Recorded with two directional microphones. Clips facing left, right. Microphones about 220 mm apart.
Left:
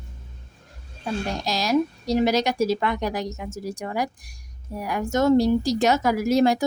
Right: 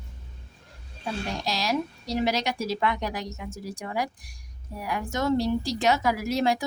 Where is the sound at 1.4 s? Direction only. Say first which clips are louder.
Left 7 dB; 45° left (ahead or behind).